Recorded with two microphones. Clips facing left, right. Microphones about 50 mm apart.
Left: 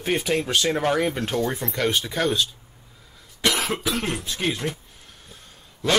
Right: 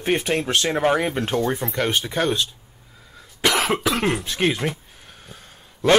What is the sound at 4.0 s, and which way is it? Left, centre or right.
Speech, right.